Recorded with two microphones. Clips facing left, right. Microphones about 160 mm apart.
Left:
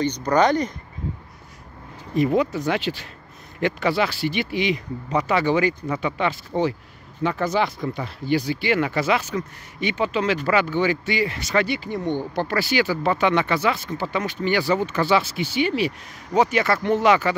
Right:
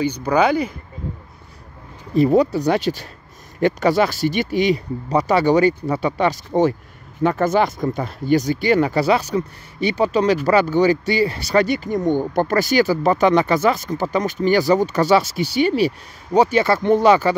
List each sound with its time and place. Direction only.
0.0 s speech: 10° right (ahead or behind)
2.1 s speech: 35° right (ahead or behind)